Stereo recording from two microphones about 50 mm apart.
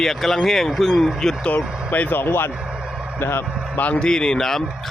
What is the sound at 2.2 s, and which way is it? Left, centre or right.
Speech, left.